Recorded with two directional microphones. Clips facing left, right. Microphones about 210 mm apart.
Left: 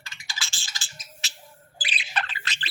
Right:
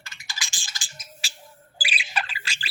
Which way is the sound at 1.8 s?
10° right (ahead or behind).